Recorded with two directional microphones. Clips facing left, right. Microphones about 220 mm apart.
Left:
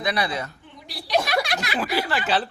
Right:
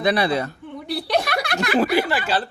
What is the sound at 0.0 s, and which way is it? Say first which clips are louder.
Speech: right 6 dB; 30° right (ahead or behind).